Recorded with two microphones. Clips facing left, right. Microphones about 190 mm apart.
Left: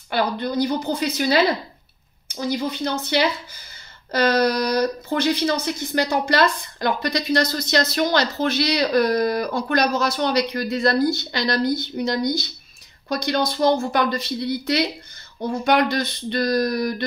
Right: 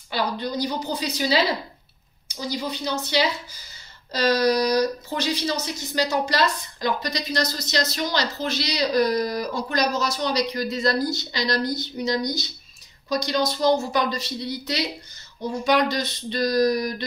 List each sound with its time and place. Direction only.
0.1 s speech: 55° left (ahead or behind)